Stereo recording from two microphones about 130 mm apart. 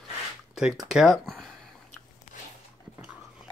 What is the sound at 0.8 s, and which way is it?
Speech, centre (ahead or behind).